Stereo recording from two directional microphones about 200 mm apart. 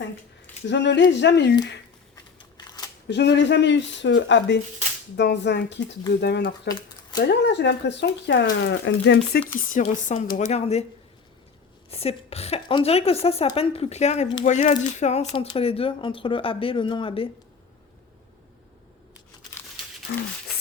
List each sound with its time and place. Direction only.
0.7 s speech: 60° left (ahead or behind)
2.6 s a sound: 20° left (ahead or behind)
3.1 s speech: 60° left (ahead or behind)
6.7 s a sound: 20° left (ahead or behind)
7.2 s speech: 60° left (ahead or behind)
9.7 s speech: 40° left (ahead or behind)
11.9 s a woman's voice: 30° left (ahead or behind)
20.1 s speech: 50° left (ahead or behind)